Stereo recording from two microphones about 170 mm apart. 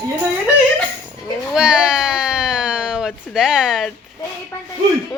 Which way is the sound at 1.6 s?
5° right (ahead or behind).